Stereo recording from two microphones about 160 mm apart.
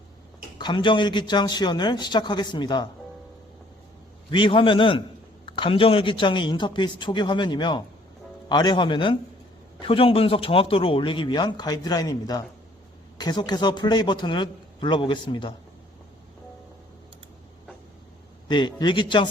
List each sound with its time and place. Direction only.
0.6 s speech: 30° left (ahead or behind)
4.3 s speech: 30° left (ahead or behind)
18.4 s speech: 30° left (ahead or behind)